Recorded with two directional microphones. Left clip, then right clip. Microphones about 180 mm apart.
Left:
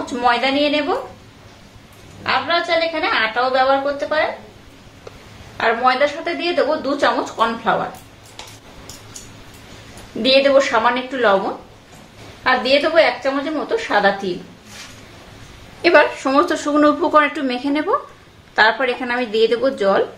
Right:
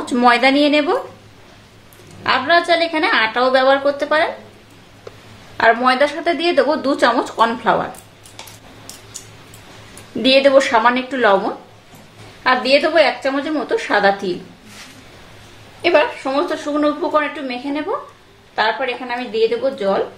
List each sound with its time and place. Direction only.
0.0 s a woman's voice: 40° right (ahead or behind)
2.2 s a woman's voice: 45° right (ahead or behind)
5.6 s a woman's voice: 35° right (ahead or behind)
10.2 s a woman's voice: 25° right (ahead or behind)
15.8 s a woman's voice: 20° left (ahead or behind)